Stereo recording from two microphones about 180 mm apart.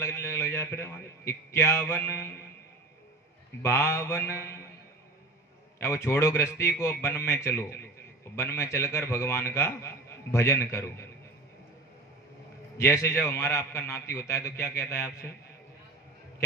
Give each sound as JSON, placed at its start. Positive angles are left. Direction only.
{"t": 0.0, "sound": "a man's voice", "side_deg": 15}
{"t": 3.6, "sound": "a man's voice", "side_deg": 15}
{"t": 5.8, "sound": "a man's voice", "side_deg": 15}
{"t": 12.7, "sound": "a man's voice", "side_deg": 15}